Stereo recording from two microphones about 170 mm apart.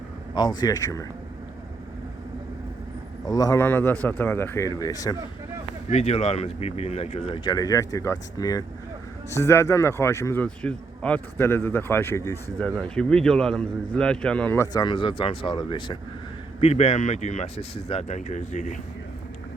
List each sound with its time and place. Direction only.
0.3 s speech: 25° left (ahead or behind)
3.2 s speech: 20° left (ahead or behind)
5.9 s speech: 40° left (ahead or behind)
16.6 s speech: 40° left (ahead or behind)